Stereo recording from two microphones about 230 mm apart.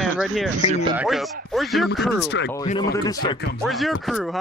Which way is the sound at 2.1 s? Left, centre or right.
Left.